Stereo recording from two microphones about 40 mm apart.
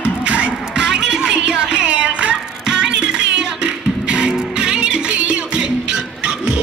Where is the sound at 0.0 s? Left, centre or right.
Right.